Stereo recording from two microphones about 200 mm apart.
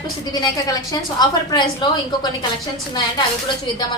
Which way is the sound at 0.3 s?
20° left (ahead or behind).